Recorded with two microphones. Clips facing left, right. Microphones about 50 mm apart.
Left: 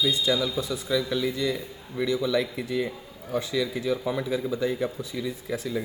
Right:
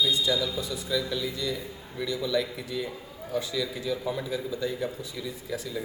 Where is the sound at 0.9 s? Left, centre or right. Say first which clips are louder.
Left 4 dB; left.